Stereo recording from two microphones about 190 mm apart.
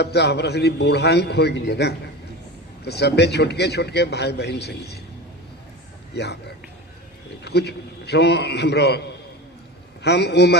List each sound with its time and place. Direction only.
0.0 s a man's voice: 60° left (ahead or behind)
6.1 s a man's voice: 60° left (ahead or behind)
7.4 s a man's voice: 60° left (ahead or behind)